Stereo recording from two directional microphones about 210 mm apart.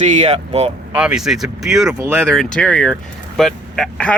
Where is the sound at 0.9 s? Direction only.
5° right (ahead or behind).